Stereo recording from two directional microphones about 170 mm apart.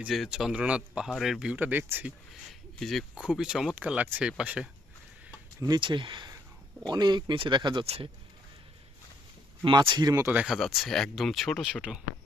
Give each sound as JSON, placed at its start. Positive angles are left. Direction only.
{"t": 0.0, "sound": "speech", "side_deg": 0}
{"t": 2.5, "sound": "speech", "side_deg": 0}
{"t": 5.5, "sound": "speech", "side_deg": -25}
{"t": 7.9, "sound": "speech", "side_deg": -35}
{"t": 9.6, "sound": "speech", "side_deg": -30}